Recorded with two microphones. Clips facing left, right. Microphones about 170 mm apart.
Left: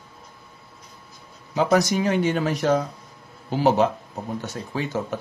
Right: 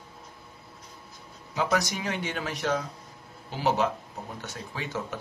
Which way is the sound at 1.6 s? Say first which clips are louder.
Left 8 dB; 35° left (ahead or behind).